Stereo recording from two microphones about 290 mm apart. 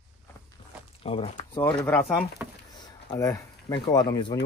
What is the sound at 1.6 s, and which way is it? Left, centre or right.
Speech, centre.